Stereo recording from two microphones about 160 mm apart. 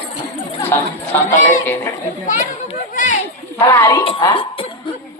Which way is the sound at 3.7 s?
15° left (ahead or behind).